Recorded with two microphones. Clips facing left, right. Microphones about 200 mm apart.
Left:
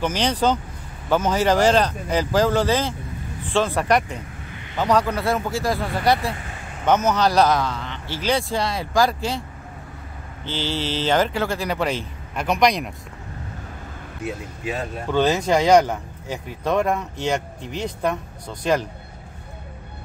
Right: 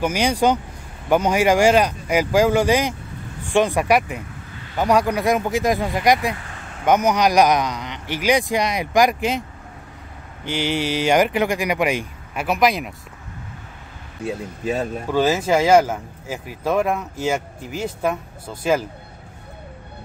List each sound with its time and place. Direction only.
0.0 s a man's voice: 10° right (ahead or behind)
10.4 s a man's voice: 15° right (ahead or behind)
15.0 s speech: 5° right (ahead or behind)